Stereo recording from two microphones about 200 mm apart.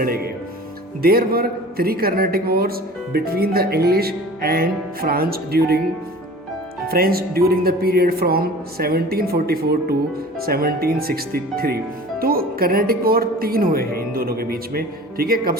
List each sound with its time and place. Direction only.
1.0 s a man's voice: 50° right (ahead or behind)
6.8 s a man's voice: 50° right (ahead or behind)